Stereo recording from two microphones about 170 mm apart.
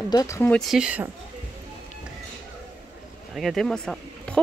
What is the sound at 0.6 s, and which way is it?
Speech, 5° right (ahead or behind).